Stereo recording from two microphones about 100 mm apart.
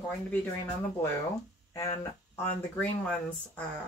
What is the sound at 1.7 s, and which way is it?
Speech, 30° left (ahead or behind).